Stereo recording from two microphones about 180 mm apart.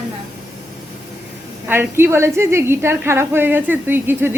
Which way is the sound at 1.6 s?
10° right (ahead or behind).